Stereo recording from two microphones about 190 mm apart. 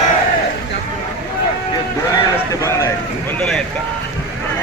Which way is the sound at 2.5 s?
15° left (ahead or behind).